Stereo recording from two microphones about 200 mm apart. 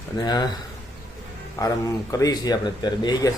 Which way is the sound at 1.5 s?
15° left (ahead or behind).